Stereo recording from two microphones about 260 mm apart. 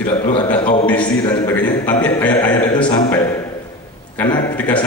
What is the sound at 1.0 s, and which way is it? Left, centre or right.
A man's voice, centre.